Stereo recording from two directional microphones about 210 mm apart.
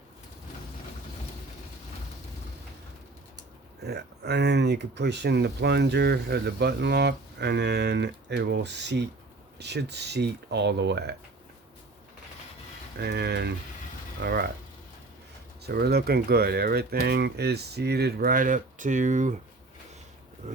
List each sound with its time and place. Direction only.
3.8 s speech: 50° right (ahead or behind)
13.0 s speech: 50° right (ahead or behind)
15.6 s speech: 50° right (ahead or behind)